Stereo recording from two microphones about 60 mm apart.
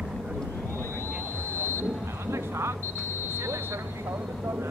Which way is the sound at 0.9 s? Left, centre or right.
Right.